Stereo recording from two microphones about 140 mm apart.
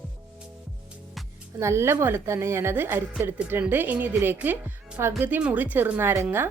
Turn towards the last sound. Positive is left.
turn(degrees=-15)  # may be behind; listen again after turning